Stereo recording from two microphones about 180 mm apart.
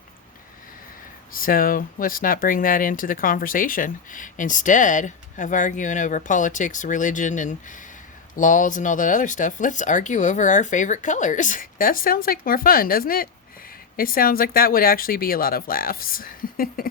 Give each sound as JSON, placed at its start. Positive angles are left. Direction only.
{"t": 1.3, "sound": "speech", "side_deg": 50}